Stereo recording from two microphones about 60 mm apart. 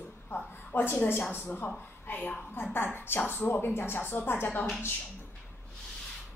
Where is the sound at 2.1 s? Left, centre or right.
Left.